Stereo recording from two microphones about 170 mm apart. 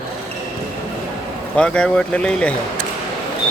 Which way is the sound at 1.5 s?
5° left (ahead or behind).